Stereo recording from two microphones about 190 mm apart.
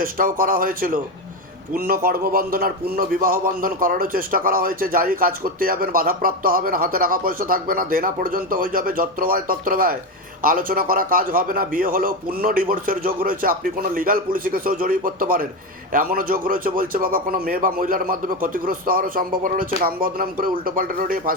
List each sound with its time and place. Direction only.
0.0 s speech: 45° right (ahead or behind)
2.0 s speech: 50° right (ahead or behind)